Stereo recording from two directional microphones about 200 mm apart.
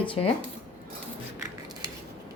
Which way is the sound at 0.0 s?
25° left (ahead or behind).